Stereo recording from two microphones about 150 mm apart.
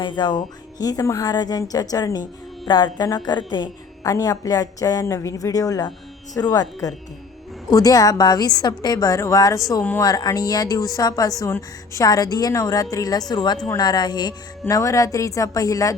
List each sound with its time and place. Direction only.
0.0 s a woman's voice: 30° left (ahead or behind)